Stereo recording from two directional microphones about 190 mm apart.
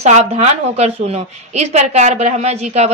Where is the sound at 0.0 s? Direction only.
35° right (ahead or behind).